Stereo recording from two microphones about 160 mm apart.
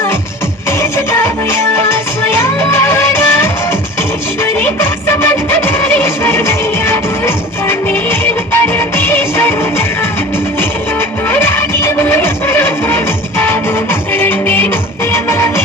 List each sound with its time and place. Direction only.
0.8 s music: 15° left (ahead or behind)
11.3 s music: 15° left (ahead or behind)
14.1 s music: 15° left (ahead or behind)